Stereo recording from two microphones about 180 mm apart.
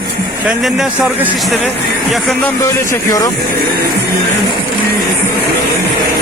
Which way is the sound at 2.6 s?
15° left (ahead or behind).